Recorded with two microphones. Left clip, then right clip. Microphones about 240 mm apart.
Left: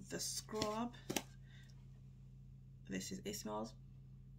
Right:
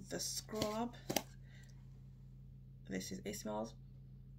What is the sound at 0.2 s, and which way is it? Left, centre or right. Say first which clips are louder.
Speech: even; left.